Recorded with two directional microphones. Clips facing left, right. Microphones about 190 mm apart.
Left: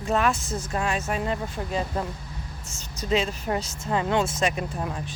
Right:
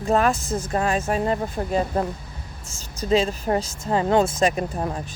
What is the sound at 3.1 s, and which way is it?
Speech, 35° right (ahead or behind).